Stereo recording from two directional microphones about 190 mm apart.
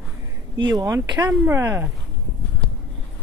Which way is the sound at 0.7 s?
20° right (ahead or behind).